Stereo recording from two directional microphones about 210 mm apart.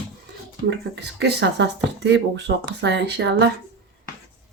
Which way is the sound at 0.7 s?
55° right (ahead or behind).